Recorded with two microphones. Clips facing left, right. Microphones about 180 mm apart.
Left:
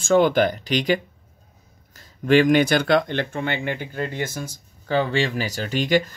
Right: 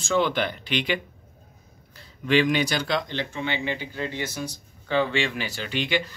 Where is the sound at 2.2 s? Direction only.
45° left (ahead or behind).